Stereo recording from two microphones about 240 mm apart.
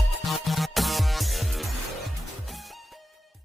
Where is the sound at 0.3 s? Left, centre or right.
Centre.